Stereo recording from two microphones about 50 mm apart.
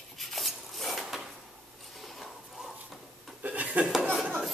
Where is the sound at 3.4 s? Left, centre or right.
Right.